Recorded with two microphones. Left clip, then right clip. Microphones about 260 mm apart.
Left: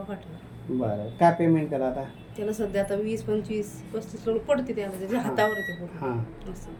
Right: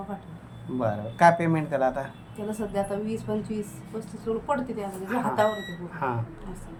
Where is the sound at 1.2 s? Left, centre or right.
Right.